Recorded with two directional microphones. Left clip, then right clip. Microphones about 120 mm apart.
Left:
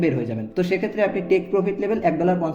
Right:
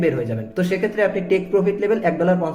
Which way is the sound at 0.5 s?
40° left (ahead or behind).